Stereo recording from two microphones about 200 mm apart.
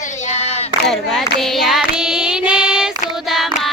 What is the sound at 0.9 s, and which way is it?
Child singing, centre (ahead or behind).